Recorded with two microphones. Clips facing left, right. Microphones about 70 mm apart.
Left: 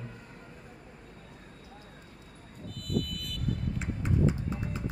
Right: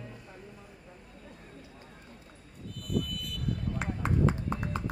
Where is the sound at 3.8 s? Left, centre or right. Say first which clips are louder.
Right 1 dB; right.